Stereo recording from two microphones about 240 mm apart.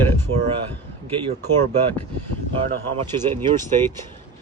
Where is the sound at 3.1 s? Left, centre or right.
Centre.